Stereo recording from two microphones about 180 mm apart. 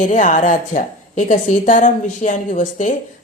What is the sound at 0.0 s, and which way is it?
A woman's voice, 45° left (ahead or behind).